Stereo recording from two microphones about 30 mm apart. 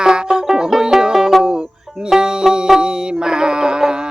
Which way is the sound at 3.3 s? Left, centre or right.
Right.